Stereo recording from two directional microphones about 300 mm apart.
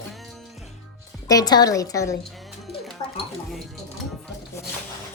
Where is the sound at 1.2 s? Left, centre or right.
Centre.